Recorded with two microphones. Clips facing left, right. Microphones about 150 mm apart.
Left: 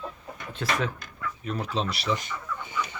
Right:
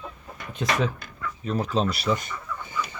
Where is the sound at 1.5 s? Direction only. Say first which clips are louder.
Right 5 dB; 40° right (ahead or behind).